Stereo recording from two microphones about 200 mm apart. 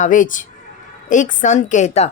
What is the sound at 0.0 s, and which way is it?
A woman's voice, 40° left (ahead or behind).